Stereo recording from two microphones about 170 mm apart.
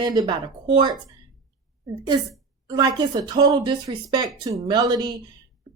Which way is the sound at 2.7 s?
25° right (ahead or behind).